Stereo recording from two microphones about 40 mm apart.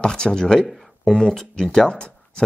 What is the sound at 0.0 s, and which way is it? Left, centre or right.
Speech, left.